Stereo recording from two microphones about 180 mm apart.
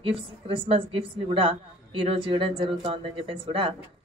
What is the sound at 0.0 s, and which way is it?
A woman's voice, 30° right (ahead or behind).